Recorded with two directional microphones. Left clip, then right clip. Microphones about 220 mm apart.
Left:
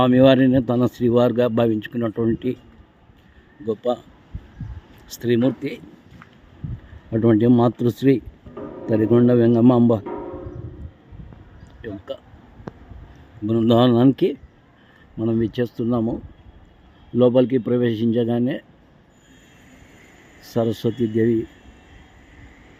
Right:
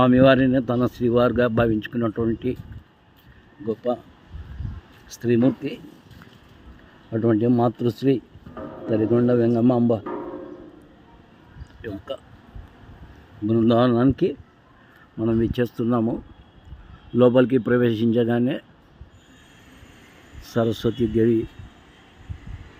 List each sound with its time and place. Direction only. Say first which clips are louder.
0.0 s speech: left 1 dB; 10° left (ahead or behind)
3.7 s speech: left 2 dB; 20° left (ahead or behind)
5.0 s speech: left 1 dB; 15° left (ahead or behind)
7.1 s speech: left 4 dB; 15° left (ahead or behind)
11.8 s speech: even; 10° left (ahead or behind)
13.5 s speech: left 2 dB; 20° left (ahead or behind)
15.2 s a man's voice: even; 5° left (ahead or behind)
17.2 s a man's voice: even; centre (ahead or behind)
20.5 s speech: left 1 dB; 10° left (ahead or behind)